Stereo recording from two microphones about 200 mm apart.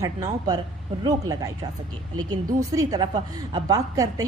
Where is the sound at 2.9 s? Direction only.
20° right (ahead or behind).